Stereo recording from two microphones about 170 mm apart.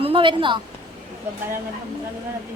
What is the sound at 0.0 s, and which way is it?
Speech, 30° right (ahead or behind).